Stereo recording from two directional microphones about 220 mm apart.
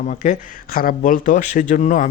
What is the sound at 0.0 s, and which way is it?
Speech, 35° left (ahead or behind).